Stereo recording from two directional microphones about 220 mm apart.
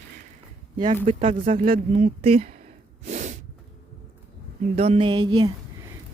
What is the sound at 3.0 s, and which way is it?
Snort, 35° right (ahead or behind).